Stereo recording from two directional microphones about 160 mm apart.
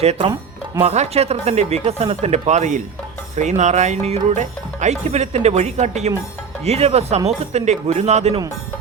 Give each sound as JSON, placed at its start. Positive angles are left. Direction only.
{"t": 0.0, "sound": "speech", "side_deg": -40}